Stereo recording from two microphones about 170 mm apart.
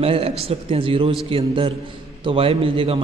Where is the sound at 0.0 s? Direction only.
35° right (ahead or behind).